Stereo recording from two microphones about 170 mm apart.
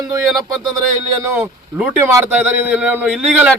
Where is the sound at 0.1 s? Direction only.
20° right (ahead or behind).